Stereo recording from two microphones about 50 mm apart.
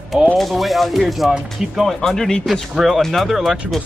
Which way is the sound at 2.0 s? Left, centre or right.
Centre.